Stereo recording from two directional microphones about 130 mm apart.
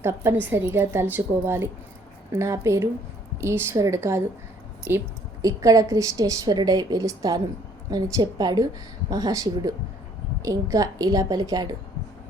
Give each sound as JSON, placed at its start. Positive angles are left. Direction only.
{"t": 0.0, "sound": "a woman's voice", "side_deg": -20}